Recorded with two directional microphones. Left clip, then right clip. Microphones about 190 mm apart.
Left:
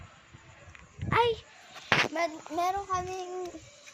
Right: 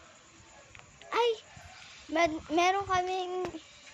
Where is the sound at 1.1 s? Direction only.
Centre (ahead or behind).